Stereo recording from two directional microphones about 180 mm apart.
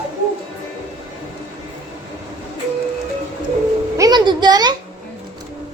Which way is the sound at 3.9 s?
20° right (ahead or behind).